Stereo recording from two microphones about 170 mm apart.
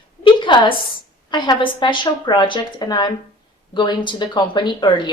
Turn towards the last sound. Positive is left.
turn(degrees=25)  # may be behind; listen again after turning